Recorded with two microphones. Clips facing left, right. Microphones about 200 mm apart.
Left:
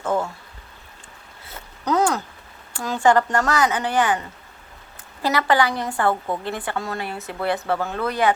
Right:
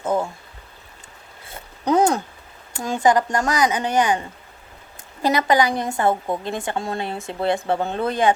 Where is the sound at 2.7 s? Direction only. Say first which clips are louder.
Even; 15° right (ahead or behind).